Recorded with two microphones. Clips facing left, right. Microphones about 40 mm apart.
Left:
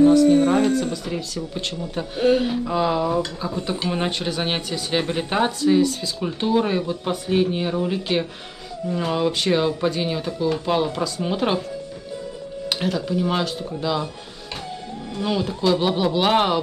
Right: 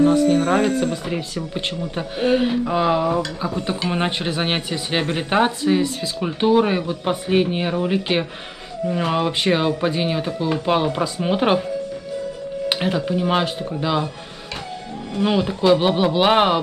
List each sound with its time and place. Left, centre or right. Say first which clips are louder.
0.3 s speech: left 1 dB; right
0.6 s speech: right 1 dB; right
12.6 s speech: right 3 dB; right
15.1 s speech: right 4 dB; right